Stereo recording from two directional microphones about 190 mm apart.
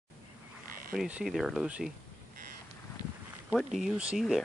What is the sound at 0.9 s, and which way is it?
Speech, 5° right (ahead or behind).